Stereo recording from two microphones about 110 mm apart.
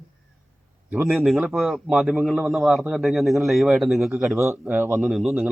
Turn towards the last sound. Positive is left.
turn(degrees=0)  # may be behind; listen again after turning